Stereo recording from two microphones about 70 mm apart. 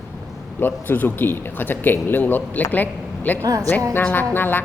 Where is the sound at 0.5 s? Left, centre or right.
Left.